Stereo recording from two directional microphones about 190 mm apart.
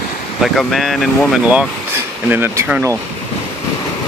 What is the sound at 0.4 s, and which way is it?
Speech, centre (ahead or behind).